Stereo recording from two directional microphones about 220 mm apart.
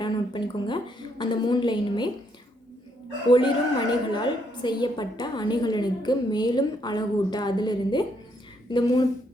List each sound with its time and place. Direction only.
0.0 s a sound: 20° left (ahead or behind)
1.2 s a woman's voice: 20° left (ahead or behind)
3.2 s a woman's voice: 20° left (ahead or behind)